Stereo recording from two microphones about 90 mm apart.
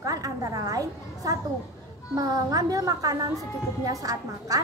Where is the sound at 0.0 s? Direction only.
40° right (ahead or behind).